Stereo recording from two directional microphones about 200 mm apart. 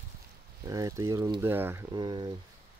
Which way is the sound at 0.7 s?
15° right (ahead or behind).